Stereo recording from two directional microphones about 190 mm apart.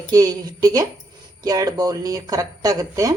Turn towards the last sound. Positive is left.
turn(degrees=-20)  # may be behind; listen again after turning